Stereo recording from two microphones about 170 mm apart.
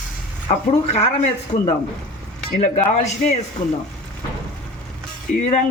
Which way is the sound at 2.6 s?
40° left (ahead or behind).